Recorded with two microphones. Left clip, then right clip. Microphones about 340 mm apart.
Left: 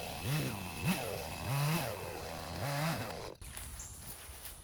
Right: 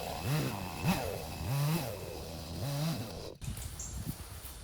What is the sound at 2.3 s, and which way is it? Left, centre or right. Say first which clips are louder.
Chainsaw: left 3 dB; left.